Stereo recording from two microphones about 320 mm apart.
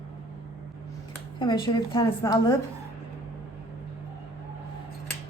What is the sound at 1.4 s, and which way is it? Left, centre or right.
A woman's voice, centre.